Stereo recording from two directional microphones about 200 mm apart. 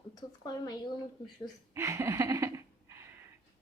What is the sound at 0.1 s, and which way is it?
Speech, 20° left (ahead or behind).